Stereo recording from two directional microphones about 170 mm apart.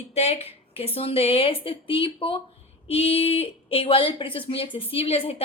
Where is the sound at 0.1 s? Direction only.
40° left (ahead or behind).